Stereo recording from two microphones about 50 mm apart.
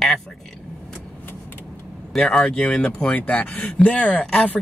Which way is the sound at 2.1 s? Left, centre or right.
Centre.